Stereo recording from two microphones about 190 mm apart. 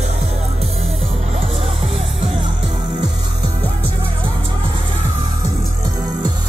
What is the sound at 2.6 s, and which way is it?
Music, 25° right (ahead or behind).